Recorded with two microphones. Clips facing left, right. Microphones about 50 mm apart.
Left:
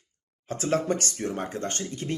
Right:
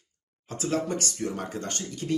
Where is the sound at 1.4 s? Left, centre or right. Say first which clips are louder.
Left 2 dB; left.